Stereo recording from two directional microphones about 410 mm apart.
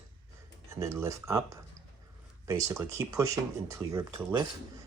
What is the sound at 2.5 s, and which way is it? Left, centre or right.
Speech, centre.